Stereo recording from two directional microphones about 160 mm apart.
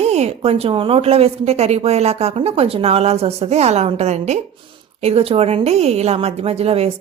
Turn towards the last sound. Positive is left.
turn(degrees=-40)  # may be behind; listen again after turning